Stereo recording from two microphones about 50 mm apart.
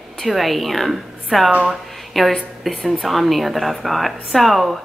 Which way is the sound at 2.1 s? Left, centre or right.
Centre.